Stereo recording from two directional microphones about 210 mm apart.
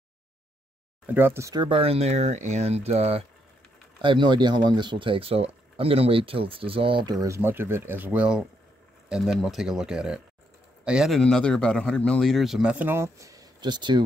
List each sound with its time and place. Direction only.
1.0 s a man's voice: 10° right (ahead or behind)